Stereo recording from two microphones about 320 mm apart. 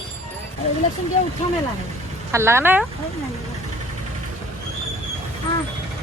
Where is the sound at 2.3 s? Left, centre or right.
Centre.